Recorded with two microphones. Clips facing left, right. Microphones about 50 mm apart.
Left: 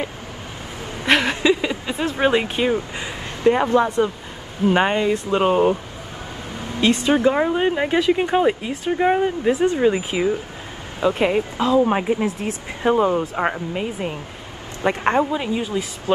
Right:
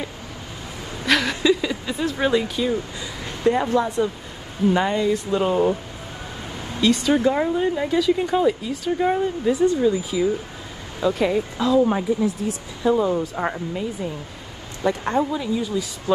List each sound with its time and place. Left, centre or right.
1.0 s speech: left
6.8 s speech: left
7.5 s speech: left
9.8 s speech: left
11.9 s speech: left
12.3 s speech: left
13.2 s speech: left
13.7 s speech: left